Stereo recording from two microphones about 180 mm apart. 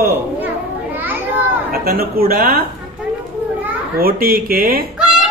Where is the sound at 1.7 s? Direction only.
55° right (ahead or behind).